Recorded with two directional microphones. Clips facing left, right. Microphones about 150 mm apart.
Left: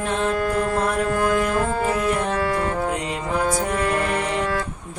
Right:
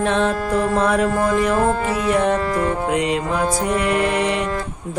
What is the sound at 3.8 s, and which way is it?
Music, 90° right.